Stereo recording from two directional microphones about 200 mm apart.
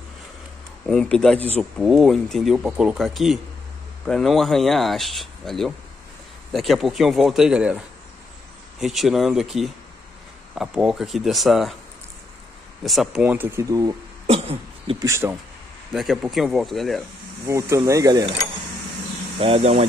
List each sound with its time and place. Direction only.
0.8 s speech: 5° left (ahead or behind)
12.8 s speech: centre (ahead or behind); by 13.9 s 20° right (ahead or behind)
14.2 s cough: 30° right (ahead or behind)
15.0 s speech: 15° right (ahead or behind)
15.9 s speech: centre (ahead or behind)
17.5 s speech: 15° right (ahead or behind)
19.3 s speech: 30° right (ahead or behind)